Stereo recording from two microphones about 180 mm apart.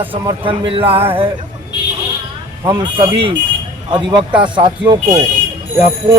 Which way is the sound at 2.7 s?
30° right (ahead or behind).